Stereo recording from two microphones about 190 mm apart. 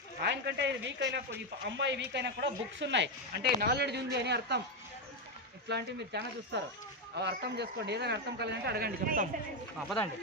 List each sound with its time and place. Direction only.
0.2 s speech: 65° right (ahead or behind)
5.6 s speech: 60° right (ahead or behind)